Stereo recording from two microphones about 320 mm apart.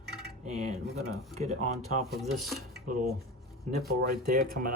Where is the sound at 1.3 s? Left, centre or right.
Right.